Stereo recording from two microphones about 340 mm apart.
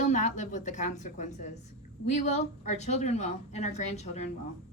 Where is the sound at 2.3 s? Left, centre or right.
Centre.